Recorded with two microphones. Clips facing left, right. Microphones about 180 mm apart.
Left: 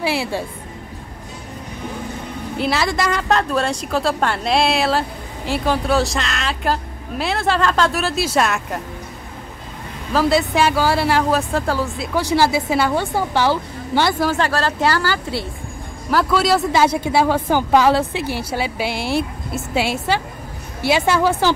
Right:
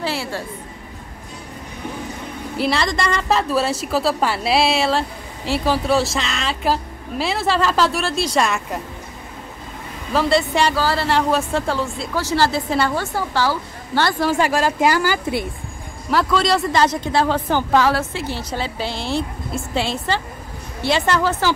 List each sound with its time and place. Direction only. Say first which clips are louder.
0.0 s a woman's voice: left 3 dB; 15° left (ahead or behind)
2.5 s speech: left 1 dB; centre (ahead or behind)
10.1 s speech: left 1 dB; centre (ahead or behind)
12.1 s a woman's voice: left 3 dB; 15° left (ahead or behind)
12.9 s a woman's voice: left 3 dB; 20° left (ahead or behind)
14.3 s speech: right 1 dB; 15° right (ahead or behind)
16.1 s a woman's voice: left 1 dB; 5° left (ahead or behind)